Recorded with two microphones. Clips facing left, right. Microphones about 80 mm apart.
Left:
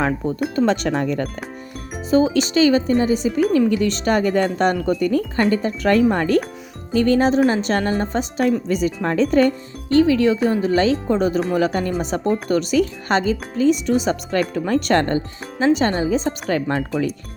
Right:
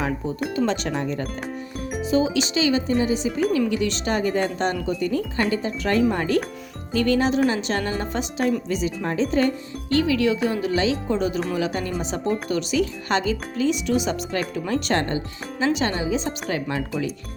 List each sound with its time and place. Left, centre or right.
0.5 s speech: left
2.0 s speech: left
6.9 s speech: left
9.9 s speech: left